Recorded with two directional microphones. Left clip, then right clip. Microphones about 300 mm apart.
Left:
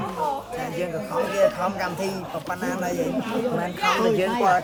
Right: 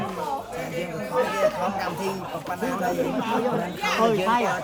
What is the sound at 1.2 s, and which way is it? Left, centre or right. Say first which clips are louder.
Speech: left 1 dB; centre.